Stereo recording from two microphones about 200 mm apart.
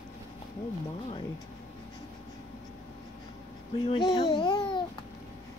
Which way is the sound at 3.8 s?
25° left (ahead or behind).